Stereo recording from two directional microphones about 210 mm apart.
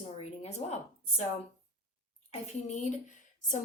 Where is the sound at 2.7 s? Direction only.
35° left (ahead or behind).